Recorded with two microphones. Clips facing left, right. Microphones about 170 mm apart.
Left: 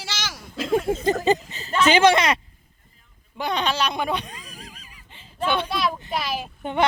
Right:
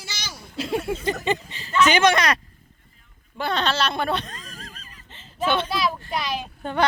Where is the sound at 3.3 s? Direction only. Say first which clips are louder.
Even; 15° left (ahead or behind).